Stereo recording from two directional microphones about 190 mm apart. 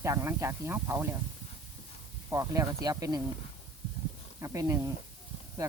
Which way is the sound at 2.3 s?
15° right (ahead or behind).